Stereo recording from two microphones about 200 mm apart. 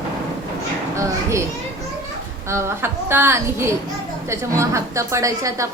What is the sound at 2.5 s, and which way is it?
A woman's voice, 10° right (ahead or behind).